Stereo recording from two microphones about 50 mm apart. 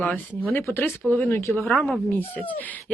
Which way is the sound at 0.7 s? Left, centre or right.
Left.